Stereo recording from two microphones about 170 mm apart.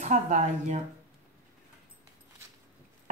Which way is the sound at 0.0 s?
45° right (ahead or behind).